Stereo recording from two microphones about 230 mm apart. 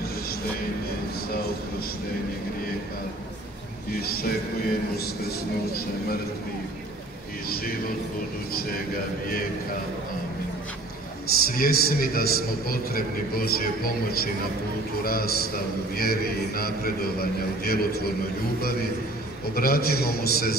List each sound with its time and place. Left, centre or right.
3.9 s a sound: left
11.3 s a man's voice: left
19.5 s a man's voice: left